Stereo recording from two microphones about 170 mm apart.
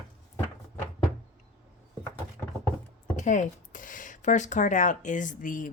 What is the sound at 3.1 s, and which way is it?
Speech, 45° left (ahead or behind).